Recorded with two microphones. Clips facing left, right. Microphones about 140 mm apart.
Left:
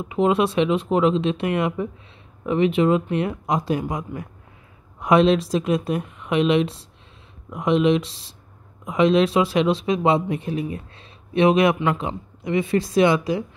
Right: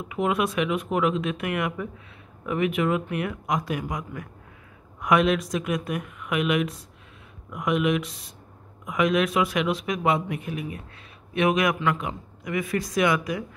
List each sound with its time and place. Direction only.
0.0 s a man's voice: 25° left (ahead or behind)